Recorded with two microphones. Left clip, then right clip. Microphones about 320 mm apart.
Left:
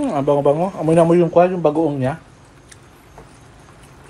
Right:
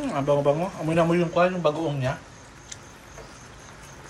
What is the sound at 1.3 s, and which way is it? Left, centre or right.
Speech, centre.